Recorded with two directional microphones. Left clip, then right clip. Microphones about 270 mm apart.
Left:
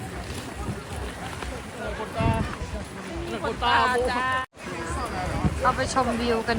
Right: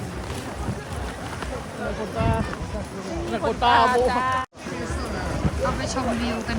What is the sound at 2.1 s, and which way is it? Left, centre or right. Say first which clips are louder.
Run: right 1 dB; right.